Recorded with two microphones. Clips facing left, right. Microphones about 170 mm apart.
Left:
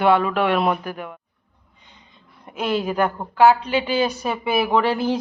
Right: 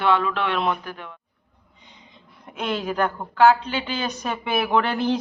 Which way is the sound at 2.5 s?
5° left (ahead or behind).